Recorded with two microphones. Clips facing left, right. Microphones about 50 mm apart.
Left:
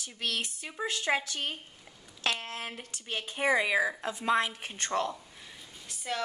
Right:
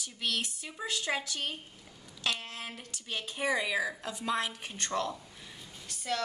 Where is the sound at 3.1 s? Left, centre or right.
Left.